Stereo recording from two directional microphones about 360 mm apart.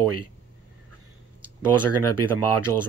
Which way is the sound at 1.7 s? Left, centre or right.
Right.